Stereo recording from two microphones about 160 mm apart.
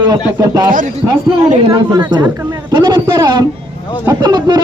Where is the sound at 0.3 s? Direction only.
25° right (ahead or behind).